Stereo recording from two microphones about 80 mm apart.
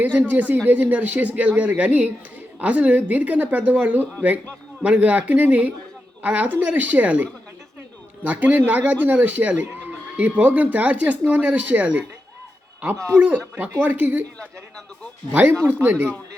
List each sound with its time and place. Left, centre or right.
0.0 s speech: right
8.3 s speech: right
13.1 s speech: right
15.3 s speech: right